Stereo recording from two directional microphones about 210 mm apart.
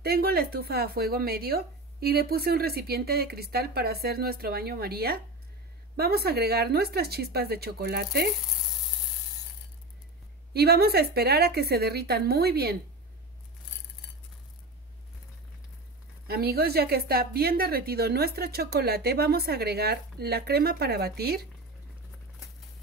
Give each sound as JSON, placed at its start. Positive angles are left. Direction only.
{"t": 0.0, "sound": "a woman's voice", "side_deg": -50}
{"t": 10.5, "sound": "a woman's voice", "side_deg": -50}
{"t": 16.3, "sound": "a woman's voice", "side_deg": -45}